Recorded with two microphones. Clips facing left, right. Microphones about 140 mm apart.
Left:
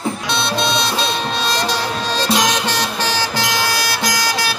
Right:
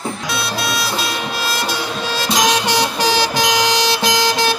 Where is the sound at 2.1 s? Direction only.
10° right (ahead or behind).